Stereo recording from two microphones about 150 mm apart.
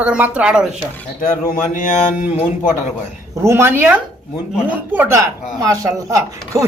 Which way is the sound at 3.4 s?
15° right (ahead or behind).